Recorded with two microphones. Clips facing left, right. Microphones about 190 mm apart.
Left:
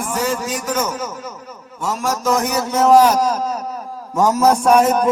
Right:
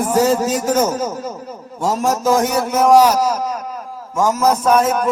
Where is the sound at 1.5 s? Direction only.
30° right (ahead or behind).